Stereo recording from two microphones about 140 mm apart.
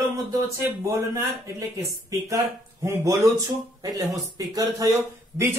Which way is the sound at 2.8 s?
20° right (ahead or behind).